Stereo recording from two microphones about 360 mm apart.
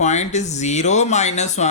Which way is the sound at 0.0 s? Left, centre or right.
Centre.